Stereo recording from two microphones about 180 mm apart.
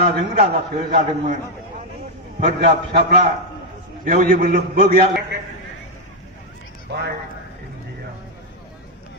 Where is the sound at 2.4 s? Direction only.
65° right (ahead or behind).